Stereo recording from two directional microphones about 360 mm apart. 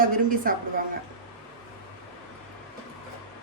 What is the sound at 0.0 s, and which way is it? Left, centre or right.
Speech, right.